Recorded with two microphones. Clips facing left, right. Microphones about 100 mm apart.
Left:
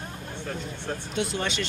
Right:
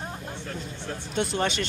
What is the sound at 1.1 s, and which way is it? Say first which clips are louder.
Speech: right 3 dB; 50° right (ahead or behind).